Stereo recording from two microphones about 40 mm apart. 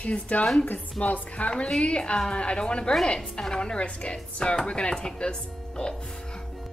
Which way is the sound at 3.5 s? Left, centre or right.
Left.